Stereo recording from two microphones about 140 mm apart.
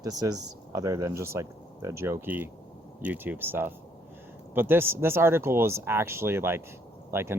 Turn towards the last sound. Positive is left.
turn(degrees=-15)  # may be behind; listen again after turning